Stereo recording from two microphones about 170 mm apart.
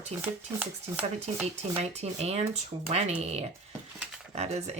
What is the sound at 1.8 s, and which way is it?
Speech, 40° right (ahead or behind).